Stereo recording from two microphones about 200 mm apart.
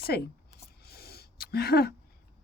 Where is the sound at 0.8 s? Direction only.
50° left (ahead or behind).